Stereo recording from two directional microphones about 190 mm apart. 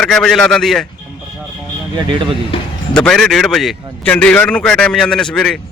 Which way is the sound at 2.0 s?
25° right (ahead or behind).